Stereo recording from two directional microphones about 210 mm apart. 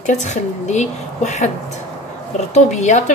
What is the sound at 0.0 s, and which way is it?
A woman's voice, 35° left (ahead or behind).